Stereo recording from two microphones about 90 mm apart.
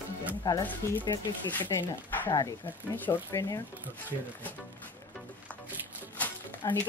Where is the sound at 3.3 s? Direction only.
40° left (ahead or behind).